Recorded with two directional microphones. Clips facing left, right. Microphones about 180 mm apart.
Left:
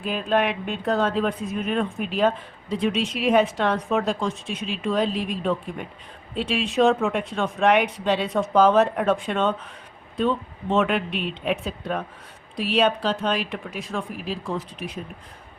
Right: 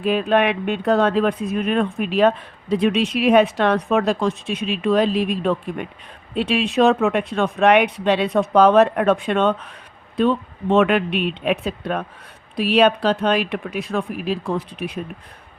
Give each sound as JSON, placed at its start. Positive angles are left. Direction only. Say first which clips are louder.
{"t": 0.0, "sound": "speech", "louder": "right 5 dB", "side_deg": -65}